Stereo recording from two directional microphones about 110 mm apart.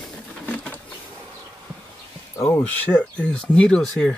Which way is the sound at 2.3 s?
25° left (ahead or behind).